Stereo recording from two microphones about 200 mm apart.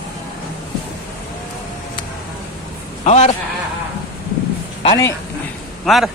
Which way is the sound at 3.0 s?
35° left (ahead or behind).